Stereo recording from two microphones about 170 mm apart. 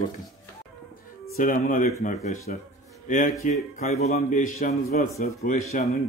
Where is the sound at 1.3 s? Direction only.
50° left (ahead or behind).